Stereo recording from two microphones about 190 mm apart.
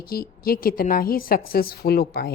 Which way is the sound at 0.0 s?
50° left (ahead or behind).